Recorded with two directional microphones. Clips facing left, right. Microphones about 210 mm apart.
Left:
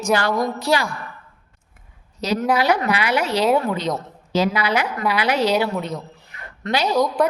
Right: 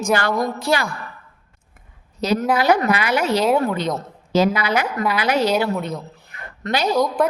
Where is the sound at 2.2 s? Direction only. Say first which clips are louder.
Right 1 dB; 55° right (ahead or behind).